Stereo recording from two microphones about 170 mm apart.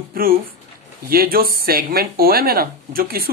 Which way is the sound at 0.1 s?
60° right (ahead or behind).